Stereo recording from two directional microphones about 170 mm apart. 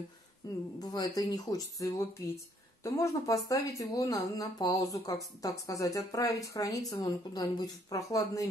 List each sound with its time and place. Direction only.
0.4 s speech: 20° left (ahead or behind)